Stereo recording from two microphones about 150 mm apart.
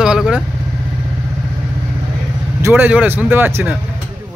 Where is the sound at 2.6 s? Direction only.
15° right (ahead or behind).